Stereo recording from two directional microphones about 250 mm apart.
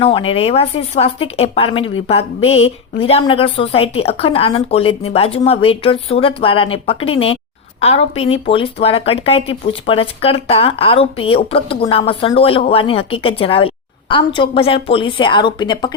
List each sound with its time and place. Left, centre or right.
0.0 s speech: left